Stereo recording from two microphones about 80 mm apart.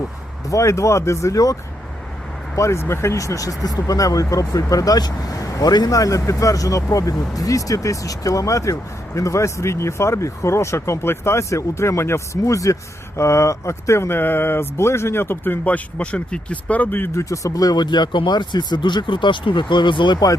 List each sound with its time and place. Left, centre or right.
0.4 s speech: left
2.6 s speech: left
17.2 s speech: left